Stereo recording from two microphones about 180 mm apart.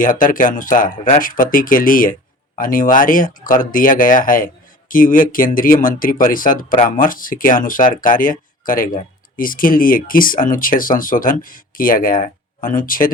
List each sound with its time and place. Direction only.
0.0 s speech: 50° left (ahead or behind)